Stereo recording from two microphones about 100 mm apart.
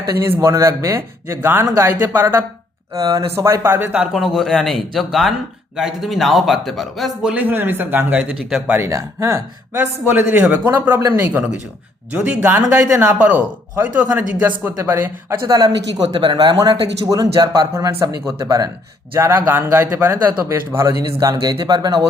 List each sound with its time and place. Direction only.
0.0 s a man's voice: 30° right (ahead or behind)
2.9 s a man's voice: 35° right (ahead or behind); by 7.1 s centre (ahead or behind)
7.2 s speech: 10° right (ahead or behind)
8.7 s speech: 30° right (ahead or behind)
9.7 s a man's voice: 20° right (ahead or behind); by 18.7 s 40° right (ahead or behind)
19.1 s a man's voice: 25° right (ahead or behind)
20.4 s speech: 30° right (ahead or behind)